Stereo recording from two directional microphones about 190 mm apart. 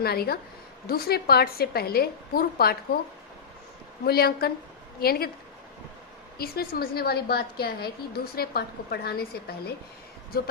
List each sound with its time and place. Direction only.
0.0 s a woman's voice: 55° left (ahead or behind)
4.0 s a woman's voice: 55° left (ahead or behind)
6.4 s a woman's voice: 55° left (ahead or behind)